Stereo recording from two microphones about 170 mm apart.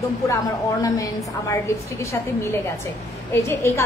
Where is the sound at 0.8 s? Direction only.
20° left (ahead or behind).